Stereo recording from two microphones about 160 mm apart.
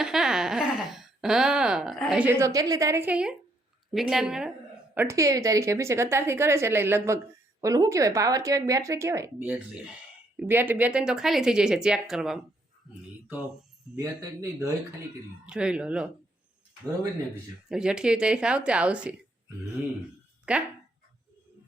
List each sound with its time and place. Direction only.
0.0 s speech: 5° right (ahead or behind)
4.9 s a woman's voice: 20° right (ahead or behind); by 12.5 s 5° right (ahead or behind)
13.9 s speech: 20° right (ahead or behind)
15.4 s speech: 5° right (ahead or behind)
17.7 s speech: 5° right (ahead or behind)
20.5 s a woman's voice: 5° right (ahead or behind)